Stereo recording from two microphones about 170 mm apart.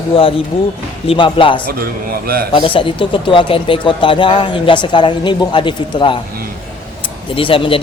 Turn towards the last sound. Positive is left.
turn(degrees=30)  # may be behind; listen again after turning